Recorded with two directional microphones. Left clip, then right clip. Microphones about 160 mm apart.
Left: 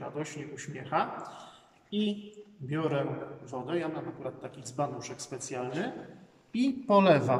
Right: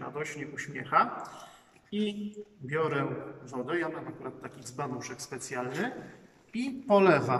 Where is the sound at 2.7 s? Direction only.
20° left (ahead or behind).